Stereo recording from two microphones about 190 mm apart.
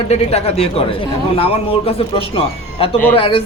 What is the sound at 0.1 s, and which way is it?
Speech, 35° left (ahead or behind).